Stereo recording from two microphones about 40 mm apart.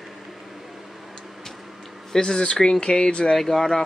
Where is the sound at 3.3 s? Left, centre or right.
Centre.